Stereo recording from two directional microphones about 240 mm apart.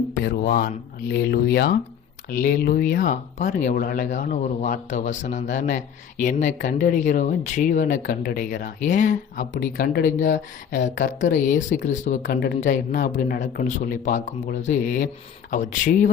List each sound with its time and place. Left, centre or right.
0.3 s speech: left